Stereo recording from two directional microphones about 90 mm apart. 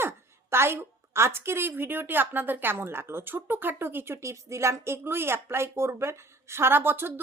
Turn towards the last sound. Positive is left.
turn(degrees=-25)  # may be behind; listen again after turning